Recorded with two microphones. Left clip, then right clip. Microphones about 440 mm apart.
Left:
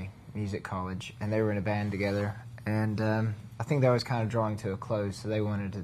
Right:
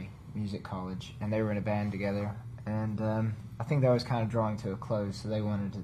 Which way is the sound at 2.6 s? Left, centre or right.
Left.